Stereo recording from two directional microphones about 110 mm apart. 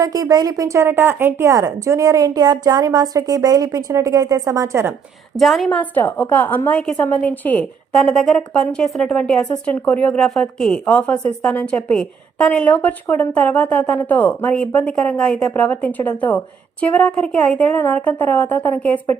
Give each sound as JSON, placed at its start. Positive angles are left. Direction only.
{"t": 0.0, "sound": "a woman's voice", "side_deg": -35}
{"t": 5.4, "sound": "a woman's voice", "side_deg": 0}